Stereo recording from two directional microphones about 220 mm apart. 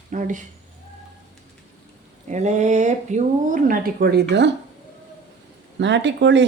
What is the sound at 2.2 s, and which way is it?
Speech, 30° right (ahead or behind).